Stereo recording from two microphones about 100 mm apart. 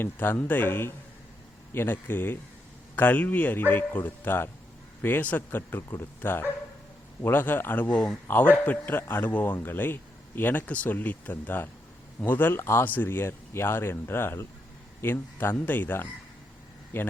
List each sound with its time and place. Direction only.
0.0 s a man's voice: 20° left (ahead or behind)